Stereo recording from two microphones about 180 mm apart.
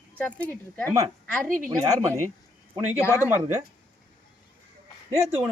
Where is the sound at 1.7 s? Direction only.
20° right (ahead or behind).